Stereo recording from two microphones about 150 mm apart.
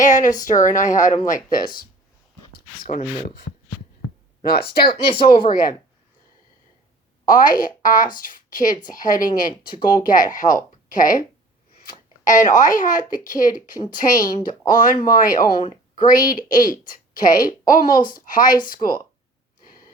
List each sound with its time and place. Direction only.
0.0 s a woman's voice: 55° left (ahead or behind)
4.9 s speech: 35° left (ahead or behind)
5.5 s speech: 70° left (ahead or behind)
7.3 s a woman's voice: 65° left (ahead or behind)
19.6 s snort: 70° left (ahead or behind)